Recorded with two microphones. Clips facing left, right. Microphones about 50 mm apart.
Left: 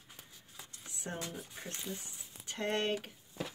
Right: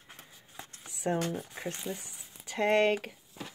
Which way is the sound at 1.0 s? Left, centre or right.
Right.